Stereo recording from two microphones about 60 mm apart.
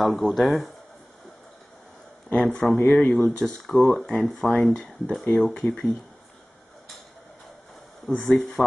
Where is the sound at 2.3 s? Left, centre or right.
Centre.